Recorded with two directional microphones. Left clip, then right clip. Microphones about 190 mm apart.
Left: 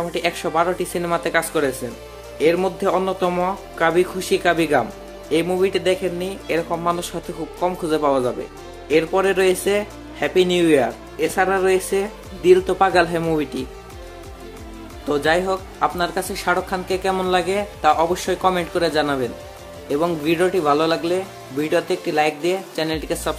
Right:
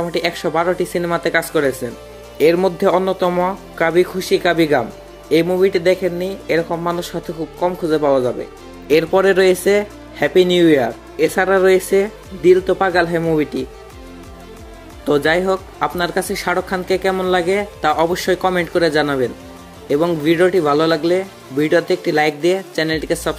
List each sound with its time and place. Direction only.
0.1 s speech: 20° right (ahead or behind)
8.8 s speech: 25° right (ahead or behind)
15.0 s speech: 25° right (ahead or behind)